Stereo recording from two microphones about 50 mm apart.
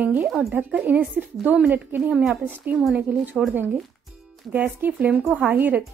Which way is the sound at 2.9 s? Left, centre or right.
Right.